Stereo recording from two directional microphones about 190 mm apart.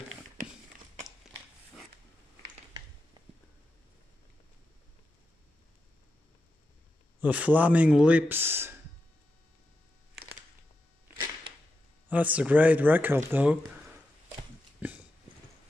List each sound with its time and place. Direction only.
3.2 s a sound: 20° right (ahead or behind)
7.2 s speech: 5° right (ahead or behind)
12.1 s speech: 10° right (ahead or behind)
14.8 s dog: 10° right (ahead or behind)